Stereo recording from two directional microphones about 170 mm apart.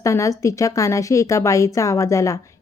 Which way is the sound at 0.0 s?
20° left (ahead or behind).